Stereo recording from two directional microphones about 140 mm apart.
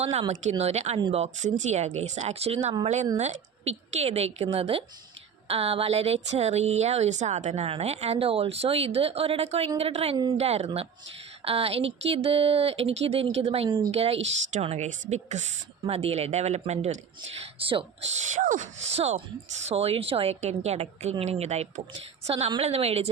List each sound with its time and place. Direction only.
0.0 s speech: 50° right (ahead or behind)
0.9 s speech: 35° right (ahead or behind)
1.2 s speech: 60° right (ahead or behind)
15.9 s speech: 45° right (ahead or behind)
17.4 s speech: 40° right (ahead or behind)
18.1 s speech: 60° right (ahead or behind)